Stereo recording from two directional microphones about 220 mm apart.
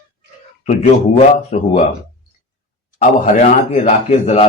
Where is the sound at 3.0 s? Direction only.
35° left (ahead or behind).